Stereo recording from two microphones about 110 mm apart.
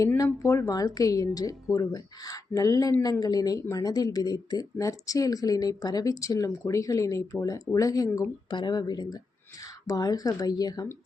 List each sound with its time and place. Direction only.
0.4 s speech: 30° left (ahead or behind)
8.4 s speech: 45° left (ahead or behind)